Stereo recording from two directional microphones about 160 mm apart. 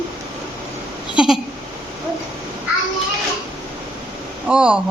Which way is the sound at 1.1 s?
5° right (ahead or behind).